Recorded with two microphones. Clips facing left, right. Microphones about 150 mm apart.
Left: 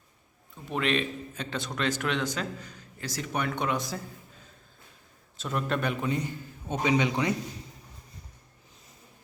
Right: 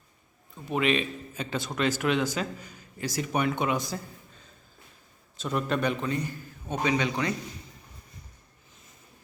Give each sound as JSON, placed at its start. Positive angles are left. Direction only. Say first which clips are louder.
{"t": 0.7, "sound": "a man's voice", "louder": "right 2 dB", "side_deg": -5}
{"t": 5.4, "sound": "a man's voice", "louder": "right 2 dB", "side_deg": 0}
{"t": 6.1, "sound": "a man's voice", "louder": "even", "side_deg": 20}